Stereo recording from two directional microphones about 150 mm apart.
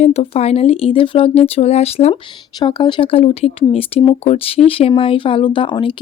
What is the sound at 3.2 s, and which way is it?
Speech, 45° left (ahead or behind).